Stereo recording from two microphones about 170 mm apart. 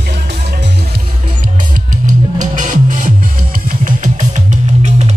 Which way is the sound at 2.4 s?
50° right (ahead or behind).